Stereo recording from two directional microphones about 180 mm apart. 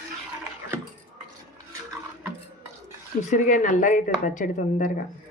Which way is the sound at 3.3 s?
45° left (ahead or behind).